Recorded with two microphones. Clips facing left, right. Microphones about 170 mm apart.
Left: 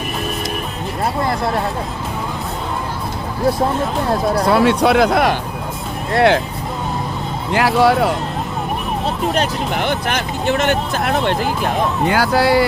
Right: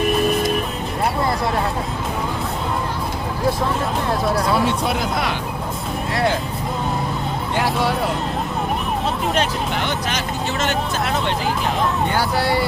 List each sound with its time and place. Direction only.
4.4 s speech: 70° left (ahead or behind)
7.5 s speech: 90° left
9.8 s speech: 55° left (ahead or behind)
12.0 s speech: 90° left